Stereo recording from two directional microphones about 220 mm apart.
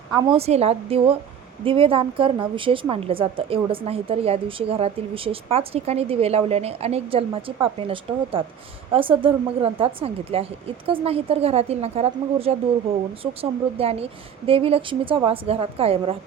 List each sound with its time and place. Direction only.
0.1 s a woman's voice: 25° right (ahead or behind)